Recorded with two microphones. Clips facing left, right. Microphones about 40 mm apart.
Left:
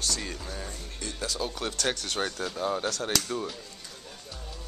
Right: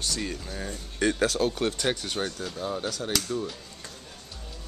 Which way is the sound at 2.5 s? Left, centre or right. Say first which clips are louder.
Left 2 dB; centre.